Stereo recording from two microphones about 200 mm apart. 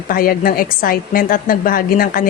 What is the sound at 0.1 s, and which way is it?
A woman's voice, 45° left (ahead or behind).